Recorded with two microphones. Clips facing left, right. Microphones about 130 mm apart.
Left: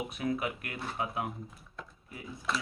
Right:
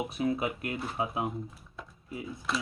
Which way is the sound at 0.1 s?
25° right (ahead or behind).